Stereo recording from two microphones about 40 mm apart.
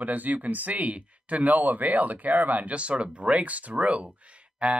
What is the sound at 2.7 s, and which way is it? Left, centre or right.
Speech, right.